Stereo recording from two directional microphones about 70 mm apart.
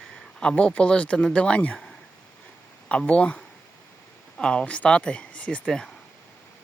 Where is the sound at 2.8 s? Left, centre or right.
Centre.